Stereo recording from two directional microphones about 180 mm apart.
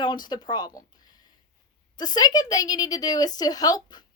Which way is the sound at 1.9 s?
25° left (ahead or behind).